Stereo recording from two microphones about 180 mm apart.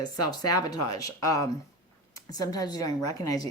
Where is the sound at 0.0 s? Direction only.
20° left (ahead or behind).